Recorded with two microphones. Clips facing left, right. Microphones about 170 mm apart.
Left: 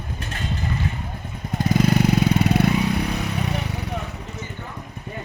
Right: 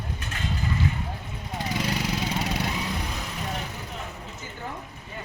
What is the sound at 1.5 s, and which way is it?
Vehicle, 50° left (ahead or behind).